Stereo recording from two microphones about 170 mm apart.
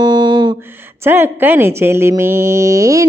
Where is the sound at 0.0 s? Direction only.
25° right (ahead or behind).